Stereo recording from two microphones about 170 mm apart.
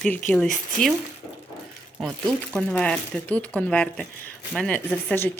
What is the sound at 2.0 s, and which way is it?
Speech, centre (ahead or behind).